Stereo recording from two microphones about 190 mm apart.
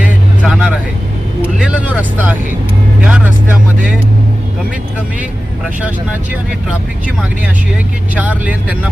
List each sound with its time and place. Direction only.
0.0 s vehicle: 5° right (ahead or behind)
8.1 s speech: 10° right (ahead or behind)